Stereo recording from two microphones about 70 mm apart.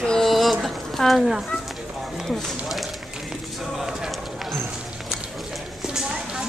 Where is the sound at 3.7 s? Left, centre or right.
Centre.